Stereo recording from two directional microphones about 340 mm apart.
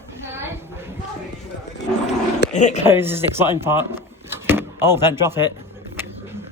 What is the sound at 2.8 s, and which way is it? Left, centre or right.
Speech, centre.